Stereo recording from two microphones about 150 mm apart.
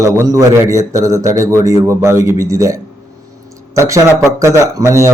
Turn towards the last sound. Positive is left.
turn(degrees=-20)  # may be behind; listen again after turning